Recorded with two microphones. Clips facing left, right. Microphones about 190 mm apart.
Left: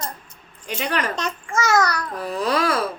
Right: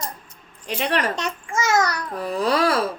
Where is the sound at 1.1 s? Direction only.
40° left (ahead or behind).